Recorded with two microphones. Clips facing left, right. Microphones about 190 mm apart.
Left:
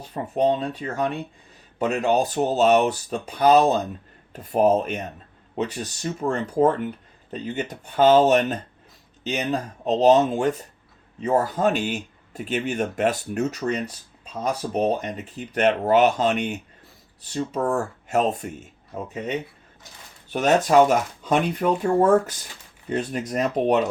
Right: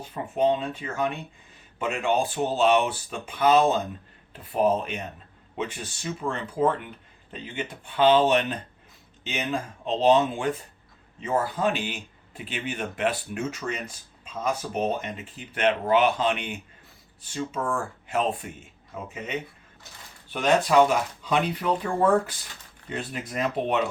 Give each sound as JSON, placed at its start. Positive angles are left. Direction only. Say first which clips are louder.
{"t": 0.0, "sound": "speech", "louder": "left 2 dB", "side_deg": 40}